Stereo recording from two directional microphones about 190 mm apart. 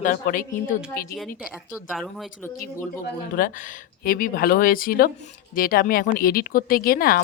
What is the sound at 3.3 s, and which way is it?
Speech, 45° left (ahead or behind).